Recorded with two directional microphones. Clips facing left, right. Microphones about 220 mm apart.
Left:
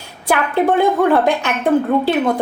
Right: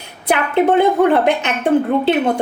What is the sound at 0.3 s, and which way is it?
A woman's voice, 20° right (ahead or behind).